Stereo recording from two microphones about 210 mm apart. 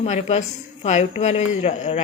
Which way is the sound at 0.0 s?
30° left (ahead or behind).